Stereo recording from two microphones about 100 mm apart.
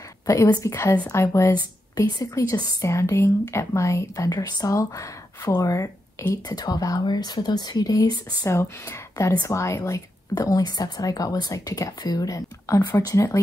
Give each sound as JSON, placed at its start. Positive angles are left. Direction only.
{"t": 0.6, "sound": "a woman's voice", "side_deg": 30}
{"t": 2.1, "sound": "a woman's voice", "side_deg": 40}